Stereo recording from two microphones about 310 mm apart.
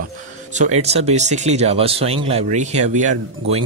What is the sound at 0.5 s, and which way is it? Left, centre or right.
Speech, right.